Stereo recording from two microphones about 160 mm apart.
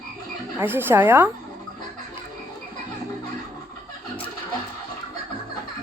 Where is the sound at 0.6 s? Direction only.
15° right (ahead or behind).